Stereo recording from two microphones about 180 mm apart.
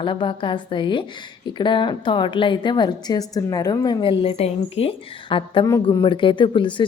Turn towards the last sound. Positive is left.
turn(degrees=25)  # may be behind; listen again after turning